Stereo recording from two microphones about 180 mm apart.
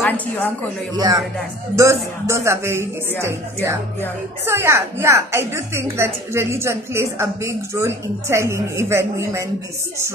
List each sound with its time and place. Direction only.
0.9 s a woman's voice: 20° right (ahead or behind)